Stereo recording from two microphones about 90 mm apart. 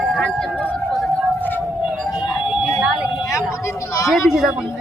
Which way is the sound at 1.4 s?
20° left (ahead or behind).